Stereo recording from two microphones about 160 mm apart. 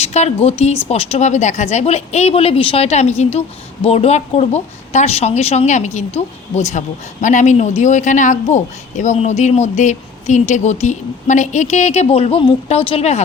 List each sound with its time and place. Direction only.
0.0 s speech: 40° left (ahead or behind)